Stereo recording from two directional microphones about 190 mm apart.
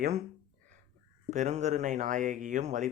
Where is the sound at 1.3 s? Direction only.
35° right (ahead or behind).